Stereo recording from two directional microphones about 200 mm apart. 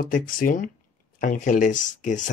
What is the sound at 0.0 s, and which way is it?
Speech, 45° left (ahead or behind).